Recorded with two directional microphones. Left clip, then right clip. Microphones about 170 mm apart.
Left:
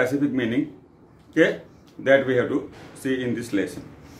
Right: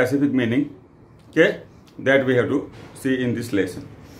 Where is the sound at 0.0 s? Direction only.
35° right (ahead or behind).